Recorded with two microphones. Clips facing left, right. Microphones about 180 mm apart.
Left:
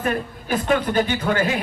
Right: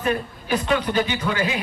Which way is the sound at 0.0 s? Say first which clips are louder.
Even; 50° left (ahead or behind).